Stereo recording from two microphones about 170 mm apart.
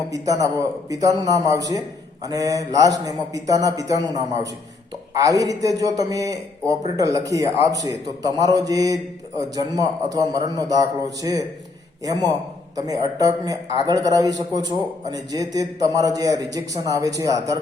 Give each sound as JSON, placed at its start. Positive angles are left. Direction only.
{"t": 0.1, "sound": "a man's voice", "side_deg": -20}